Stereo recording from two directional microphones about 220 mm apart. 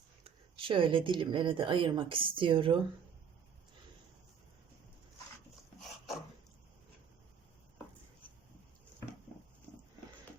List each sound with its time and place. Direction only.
0.3 s speech: 25° right (ahead or behind)